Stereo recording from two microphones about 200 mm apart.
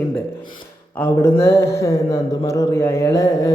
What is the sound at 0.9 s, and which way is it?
Speech, 10° left (ahead or behind).